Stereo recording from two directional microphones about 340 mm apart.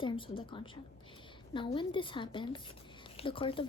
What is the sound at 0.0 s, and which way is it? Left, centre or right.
Speech, centre.